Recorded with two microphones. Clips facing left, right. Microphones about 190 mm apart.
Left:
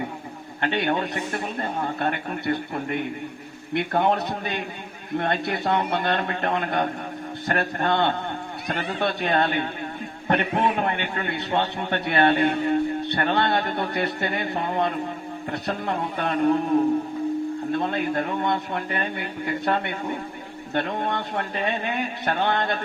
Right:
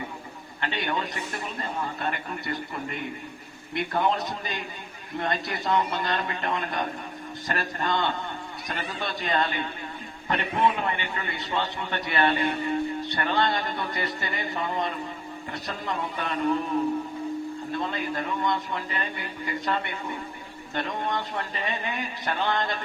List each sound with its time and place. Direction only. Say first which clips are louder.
0.6 s a man's voice: left 6 dB; 60° left (ahead or behind)
17.7 s a man's voice: left 4 dB; 60° left (ahead or behind)